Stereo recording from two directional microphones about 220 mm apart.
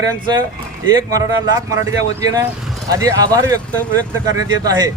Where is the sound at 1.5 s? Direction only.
15° right (ahead or behind).